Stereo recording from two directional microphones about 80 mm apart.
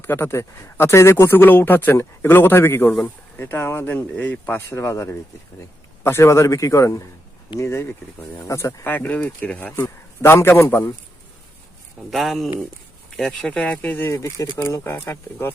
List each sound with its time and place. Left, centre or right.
0.0 s a man's voice: left
8.9 s a man's voice: left
9.7 s a man's voice: left
12.1 s speech: centre; by 14.1 s left
14.1 s a man's voice: left